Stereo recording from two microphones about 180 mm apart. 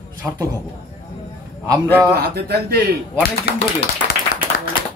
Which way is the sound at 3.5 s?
65° left (ahead or behind).